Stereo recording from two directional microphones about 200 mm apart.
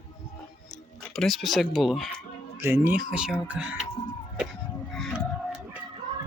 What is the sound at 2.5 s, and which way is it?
Speech, 10° right (ahead or behind).